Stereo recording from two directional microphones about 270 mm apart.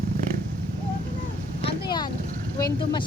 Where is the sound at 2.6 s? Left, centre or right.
Centre.